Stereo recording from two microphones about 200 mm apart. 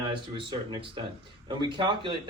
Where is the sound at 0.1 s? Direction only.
25° right (ahead or behind).